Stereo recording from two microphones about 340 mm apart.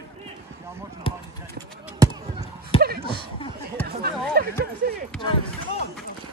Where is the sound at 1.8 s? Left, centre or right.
Centre.